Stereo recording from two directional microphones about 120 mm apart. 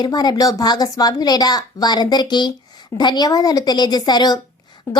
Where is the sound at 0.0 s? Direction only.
35° left (ahead or behind).